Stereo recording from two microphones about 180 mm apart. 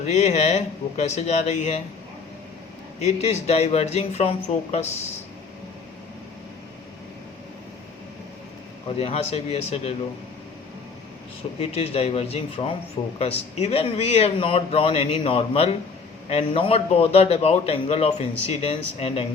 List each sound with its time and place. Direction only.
0.0 s a man's voice: 40° left (ahead or behind)
3.0 s a man's voice: 35° left (ahead or behind)
9.0 s a man's voice: 35° left (ahead or behind)
11.6 s a man's voice: 35° left (ahead or behind)